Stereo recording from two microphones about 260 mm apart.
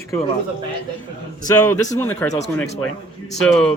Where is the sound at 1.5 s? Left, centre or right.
Centre.